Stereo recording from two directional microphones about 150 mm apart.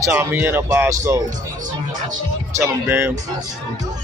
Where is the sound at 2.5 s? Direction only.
15° right (ahead or behind).